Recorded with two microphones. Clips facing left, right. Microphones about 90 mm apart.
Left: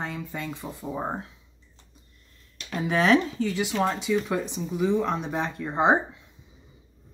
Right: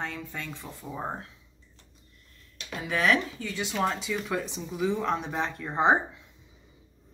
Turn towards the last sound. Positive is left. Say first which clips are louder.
# left 2 dB
turn(degrees=5)  # may be behind; listen again after turning